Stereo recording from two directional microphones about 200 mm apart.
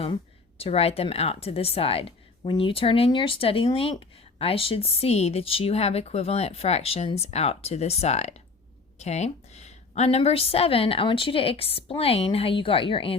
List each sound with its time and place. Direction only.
0.6 s a woman's voice: 30° left (ahead or behind)